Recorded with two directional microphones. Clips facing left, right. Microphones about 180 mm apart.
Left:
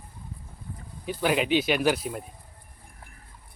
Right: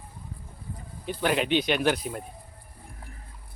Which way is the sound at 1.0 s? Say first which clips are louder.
Left 1 dB; 5° left (ahead or behind).